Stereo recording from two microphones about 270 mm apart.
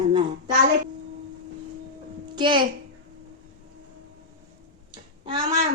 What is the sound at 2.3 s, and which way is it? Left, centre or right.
Speech, centre.